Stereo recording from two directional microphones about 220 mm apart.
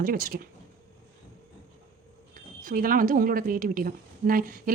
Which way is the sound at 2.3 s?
40° right (ahead or behind).